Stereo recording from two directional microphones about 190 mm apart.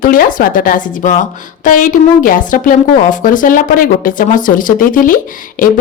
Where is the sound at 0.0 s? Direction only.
45° left (ahead or behind).